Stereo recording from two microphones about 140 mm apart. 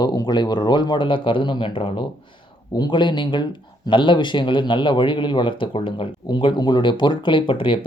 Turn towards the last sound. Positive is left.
turn(degrees=40)  # may be behind; listen again after turning